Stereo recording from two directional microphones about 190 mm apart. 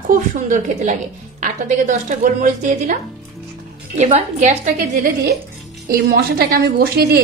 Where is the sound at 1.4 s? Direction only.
40° right (ahead or behind).